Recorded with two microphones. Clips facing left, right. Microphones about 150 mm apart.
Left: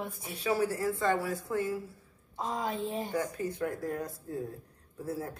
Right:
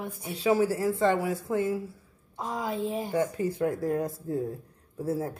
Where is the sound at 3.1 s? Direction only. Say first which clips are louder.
Right 5 dB; 25° right (ahead or behind).